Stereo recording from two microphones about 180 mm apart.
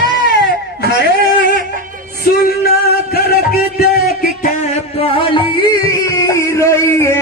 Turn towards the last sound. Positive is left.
turn(degrees=15)  # may be behind; listen again after turning